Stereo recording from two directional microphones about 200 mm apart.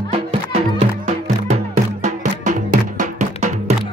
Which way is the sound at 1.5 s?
40° right (ahead or behind).